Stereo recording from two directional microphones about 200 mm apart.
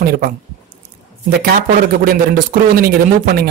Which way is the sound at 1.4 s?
45° right (ahead or behind).